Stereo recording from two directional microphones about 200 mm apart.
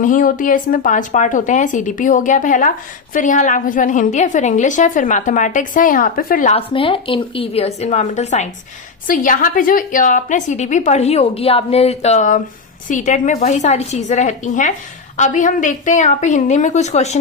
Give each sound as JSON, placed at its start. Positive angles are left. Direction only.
{"t": 0.0, "sound": "speech", "side_deg": 40}
{"t": 6.6, "sound": "speech", "side_deg": 25}